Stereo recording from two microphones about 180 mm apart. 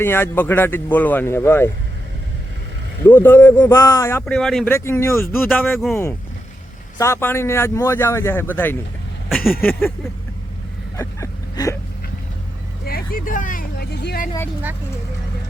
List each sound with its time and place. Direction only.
0.0 s speech: 10° left (ahead or behind)
3.1 s speech: 10° left (ahead or behind)
4.3 s speech: centre (ahead or behind)
4.7 s speech: 15° left (ahead or behind)
7.0 s speech: 15° left (ahead or behind)
10.9 s a sound: 15° left (ahead or behind)
12.8 s vehicle: 55° left (ahead or behind)